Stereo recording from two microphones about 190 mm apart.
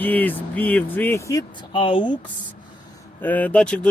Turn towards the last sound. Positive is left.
turn(degrees=5)  # may be behind; listen again after turning